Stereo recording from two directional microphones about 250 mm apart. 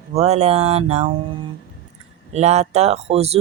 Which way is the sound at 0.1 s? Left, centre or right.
Right.